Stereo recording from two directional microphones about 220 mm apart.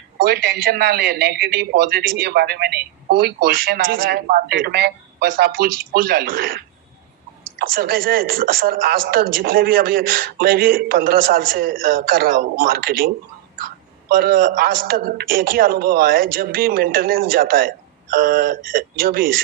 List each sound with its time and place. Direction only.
0.2 s a man's voice: 45° right (ahead or behind)
7.6 s speech: 40° right (ahead or behind)
14.1 s speech: 40° right (ahead or behind)